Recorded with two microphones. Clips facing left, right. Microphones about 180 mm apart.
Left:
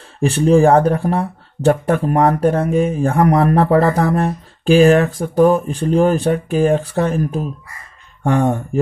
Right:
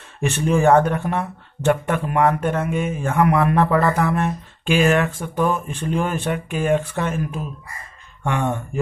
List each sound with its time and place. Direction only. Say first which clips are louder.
0.2 s speech: left 6 dB; 35° left (ahead or behind)